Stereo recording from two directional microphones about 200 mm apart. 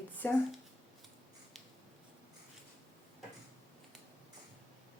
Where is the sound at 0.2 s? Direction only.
10° left (ahead or behind).